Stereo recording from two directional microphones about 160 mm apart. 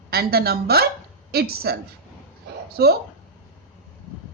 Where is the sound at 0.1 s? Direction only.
75° right (ahead or behind).